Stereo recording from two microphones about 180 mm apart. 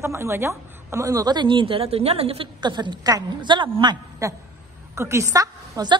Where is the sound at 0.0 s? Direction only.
15° right (ahead or behind).